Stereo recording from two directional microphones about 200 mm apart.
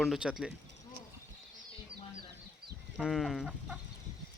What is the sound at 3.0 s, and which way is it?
Chicken, centre (ahead or behind).